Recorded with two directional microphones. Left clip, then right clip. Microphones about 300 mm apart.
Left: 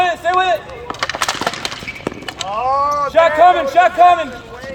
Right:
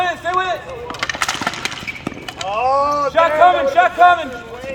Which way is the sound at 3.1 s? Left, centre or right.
Left.